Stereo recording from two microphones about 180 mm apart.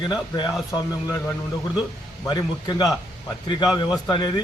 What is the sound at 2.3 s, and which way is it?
A man's voice, 20° left (ahead or behind).